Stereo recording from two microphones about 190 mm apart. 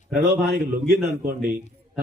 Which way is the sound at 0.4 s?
55° right (ahead or behind).